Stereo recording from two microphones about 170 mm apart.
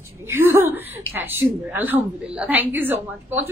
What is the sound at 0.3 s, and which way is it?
A woman's voice, 15° right (ahead or behind).